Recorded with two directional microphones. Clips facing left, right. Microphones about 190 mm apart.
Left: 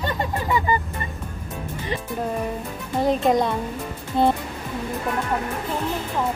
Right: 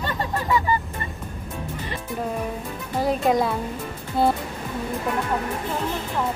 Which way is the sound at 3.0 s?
Centre (ahead or behind).